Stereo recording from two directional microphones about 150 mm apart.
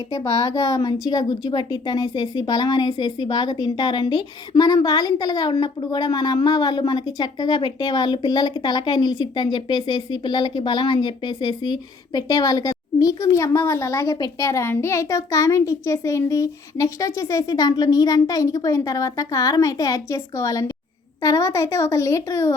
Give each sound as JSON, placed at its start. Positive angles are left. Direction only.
{"t": 0.1, "sound": "a woman's voice", "side_deg": 20}